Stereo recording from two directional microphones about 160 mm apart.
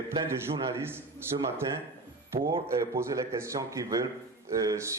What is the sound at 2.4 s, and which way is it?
A man's voice, 20° right (ahead or behind).